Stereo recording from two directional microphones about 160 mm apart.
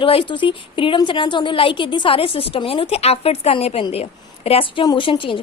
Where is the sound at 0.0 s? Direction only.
35° left (ahead or behind).